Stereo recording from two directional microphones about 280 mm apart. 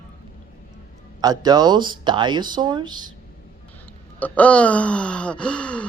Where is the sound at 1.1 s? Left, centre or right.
Centre.